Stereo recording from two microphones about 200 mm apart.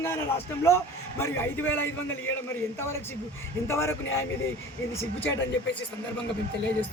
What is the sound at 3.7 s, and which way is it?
Speech, 15° left (ahead or behind).